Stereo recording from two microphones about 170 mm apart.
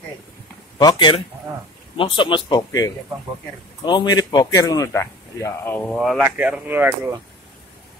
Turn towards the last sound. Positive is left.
turn(degrees=-10)  # may be behind; listen again after turning